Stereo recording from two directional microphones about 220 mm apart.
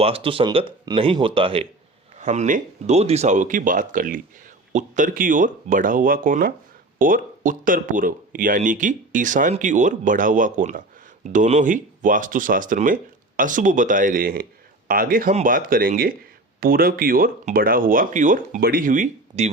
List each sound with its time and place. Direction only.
0.0 s speech: 25° right (ahead or behind)